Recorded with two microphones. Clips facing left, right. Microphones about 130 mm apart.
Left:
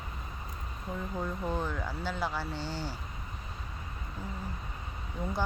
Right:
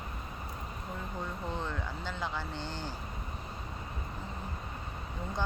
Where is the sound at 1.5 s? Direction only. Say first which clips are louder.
Left 3 dB; 10° left (ahead or behind).